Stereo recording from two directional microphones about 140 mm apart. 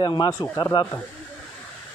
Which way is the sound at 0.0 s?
30° left (ahead or behind).